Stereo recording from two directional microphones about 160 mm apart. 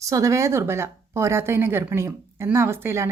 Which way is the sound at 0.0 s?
20° right (ahead or behind).